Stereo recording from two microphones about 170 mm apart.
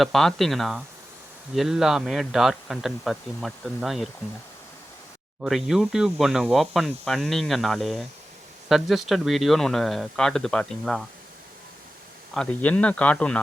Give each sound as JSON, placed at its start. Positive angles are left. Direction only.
{"t": 0.0, "sound": "speech", "side_deg": 0}
{"t": 5.4, "sound": "speech", "side_deg": 0}
{"t": 12.3, "sound": "a man's voice", "side_deg": 5}